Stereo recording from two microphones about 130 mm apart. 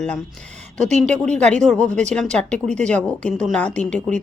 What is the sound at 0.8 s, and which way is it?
Speech, 60° right (ahead or behind).